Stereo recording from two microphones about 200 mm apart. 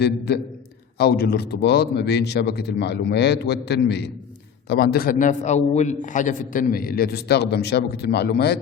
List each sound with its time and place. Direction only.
0.0 s a man's voice: 55° left (ahead or behind)